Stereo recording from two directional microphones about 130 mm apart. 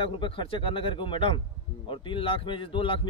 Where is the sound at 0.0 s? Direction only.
40° left (ahead or behind).